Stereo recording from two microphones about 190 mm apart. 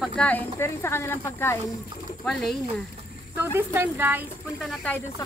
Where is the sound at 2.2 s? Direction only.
5° left (ahead or behind).